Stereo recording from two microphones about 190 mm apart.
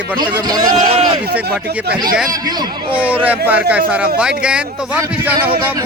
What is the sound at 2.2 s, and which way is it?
Speech, 20° right (ahead or behind).